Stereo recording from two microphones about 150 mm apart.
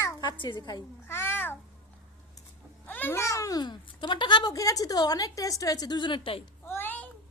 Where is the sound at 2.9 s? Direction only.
10° left (ahead or behind); by 6.4 s 35° left (ahead or behind).